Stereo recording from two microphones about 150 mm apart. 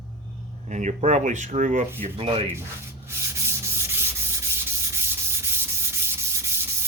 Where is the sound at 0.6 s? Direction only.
50° right (ahead or behind).